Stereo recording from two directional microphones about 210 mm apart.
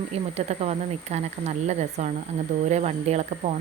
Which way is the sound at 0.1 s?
30° right (ahead or behind).